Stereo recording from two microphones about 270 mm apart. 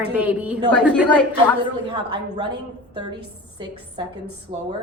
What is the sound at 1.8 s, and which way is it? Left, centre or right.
Speech, centre.